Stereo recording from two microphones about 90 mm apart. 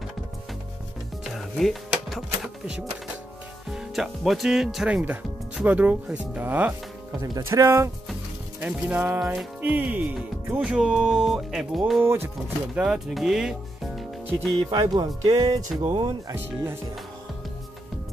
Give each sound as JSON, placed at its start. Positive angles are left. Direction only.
{"t": 1.2, "sound": "music", "side_deg": 0}
{"t": 3.7, "sound": "speech", "side_deg": -5}
{"t": 4.9, "sound": "speech", "side_deg": -15}
{"t": 7.2, "sound": "speech", "side_deg": -35}
{"t": 8.5, "sound": "speech", "side_deg": -15}
{"t": 9.2, "sound": "speech", "side_deg": -5}
{"t": 9.6, "sound": "speech", "side_deg": -20}
{"t": 12.0, "sound": "speech", "side_deg": -25}
{"t": 12.7, "sound": "speech", "side_deg": -5}
{"t": 14.6, "sound": "speech", "side_deg": -55}
{"t": 15.9, "sound": "speech", "side_deg": -55}